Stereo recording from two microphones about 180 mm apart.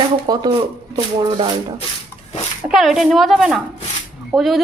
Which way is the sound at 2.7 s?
Centre (ahead or behind).